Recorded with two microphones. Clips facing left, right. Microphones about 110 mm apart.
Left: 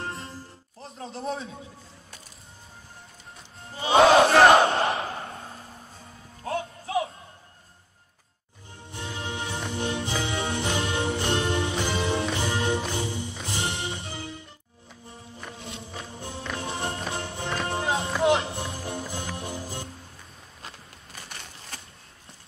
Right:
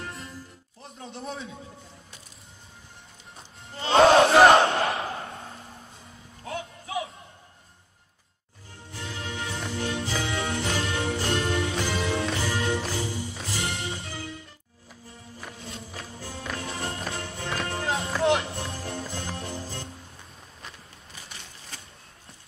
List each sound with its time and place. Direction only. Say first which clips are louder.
0.0 s music: left 3 dB; 30° left (ahead or behind)
3.8 s battle cry: even; centre (ahead or behind)
4.6 s crowd: left 1 dB; 30° left (ahead or behind)
6.4 s music: left 5 dB; 35° left (ahead or behind)
8.9 s music: left 2 dB; 20° left (ahead or behind)
18.1 s music: left 1 dB; centre (ahead or behind)
18.4 s music: left 1 dB; 25° left (ahead or behind)
21.1 s a sound: left 3 dB; 55° left (ahead or behind)